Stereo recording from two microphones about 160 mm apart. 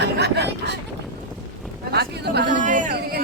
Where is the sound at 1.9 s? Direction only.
85° right.